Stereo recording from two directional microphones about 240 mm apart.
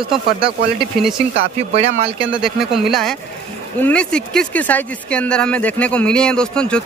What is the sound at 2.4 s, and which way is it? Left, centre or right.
Speech, centre.